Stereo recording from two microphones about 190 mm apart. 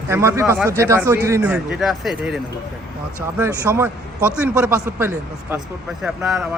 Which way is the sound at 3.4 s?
15° right (ahead or behind).